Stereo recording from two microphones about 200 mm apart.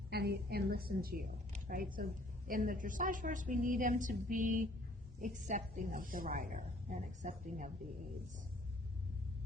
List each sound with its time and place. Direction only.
0.1 s a woman's voice: 50° right (ahead or behind)